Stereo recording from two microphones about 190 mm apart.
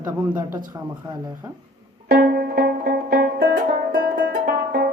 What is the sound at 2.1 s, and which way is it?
Music, 50° right (ahead or behind).